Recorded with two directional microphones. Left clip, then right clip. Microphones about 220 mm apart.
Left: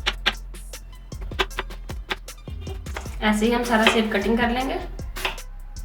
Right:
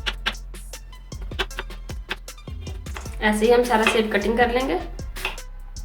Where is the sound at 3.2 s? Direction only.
40° right (ahead or behind).